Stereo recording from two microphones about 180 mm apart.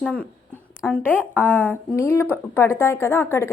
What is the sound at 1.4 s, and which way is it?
A woman's voice, 10° left (ahead or behind).